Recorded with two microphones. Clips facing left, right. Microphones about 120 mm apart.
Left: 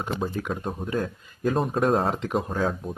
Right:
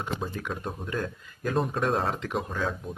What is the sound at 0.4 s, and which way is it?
Speech, 30° left (ahead or behind).